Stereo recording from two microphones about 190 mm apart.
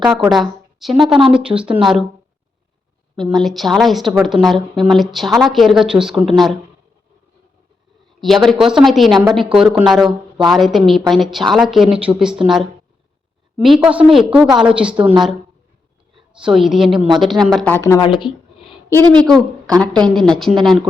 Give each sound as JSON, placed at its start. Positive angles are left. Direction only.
{"t": 0.0, "sound": "a woman's voice", "side_deg": 0}
{"t": 3.3, "sound": "a woman's voice", "side_deg": 0}
{"t": 8.2, "sound": "a woman's voice", "side_deg": 0}
{"t": 16.1, "sound": "a woman's voice", "side_deg": 0}
{"t": 18.1, "sound": "speech", "side_deg": 25}
{"t": 19.1, "sound": "a woman's voice", "side_deg": 5}